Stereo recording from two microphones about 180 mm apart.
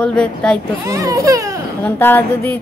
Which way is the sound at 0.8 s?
20° right (ahead or behind).